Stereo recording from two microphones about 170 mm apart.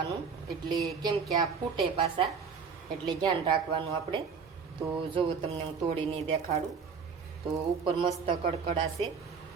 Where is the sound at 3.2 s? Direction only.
30° right (ahead or behind).